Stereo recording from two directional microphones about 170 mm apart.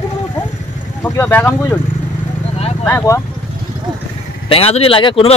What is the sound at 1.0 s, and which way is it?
Speech, 10° left (ahead or behind).